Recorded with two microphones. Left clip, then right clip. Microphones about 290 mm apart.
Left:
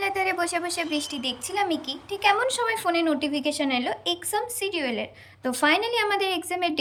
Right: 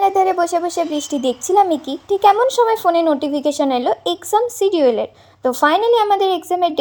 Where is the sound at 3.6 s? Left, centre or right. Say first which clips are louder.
Right 9 dB; right.